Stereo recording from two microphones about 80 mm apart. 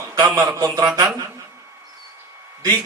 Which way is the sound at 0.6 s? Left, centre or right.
Right.